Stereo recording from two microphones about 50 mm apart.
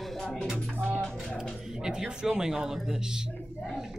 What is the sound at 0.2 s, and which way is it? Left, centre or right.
Music, centre.